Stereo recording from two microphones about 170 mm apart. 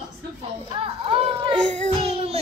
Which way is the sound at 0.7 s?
30° right (ahead or behind).